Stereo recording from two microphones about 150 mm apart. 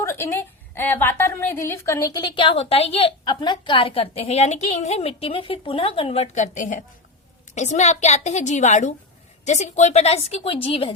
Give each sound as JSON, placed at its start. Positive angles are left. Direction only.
{"t": 0.0, "sound": "a woman's voice", "side_deg": 20}